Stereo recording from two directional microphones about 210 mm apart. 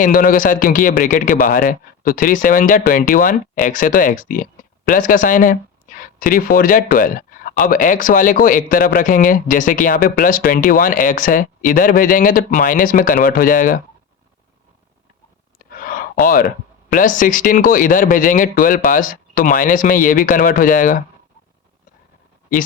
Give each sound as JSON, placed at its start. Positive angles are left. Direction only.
{"t": 0.0, "sound": "speech", "side_deg": 40}
{"t": 15.5, "sound": "a sound", "side_deg": 40}
{"t": 16.9, "sound": "speech", "side_deg": 40}